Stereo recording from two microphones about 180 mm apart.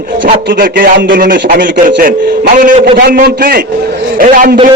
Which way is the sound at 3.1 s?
55° right (ahead or behind).